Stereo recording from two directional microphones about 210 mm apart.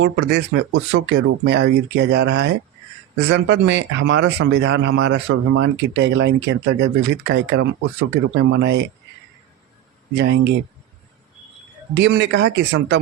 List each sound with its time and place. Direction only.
0.0 s speech: 55° right (ahead or behind)
10.2 s speech: 55° right (ahead or behind)
11.9 s speech: 55° right (ahead or behind)